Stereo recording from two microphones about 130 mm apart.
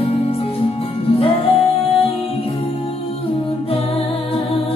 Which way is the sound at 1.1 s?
45° left (ahead or behind).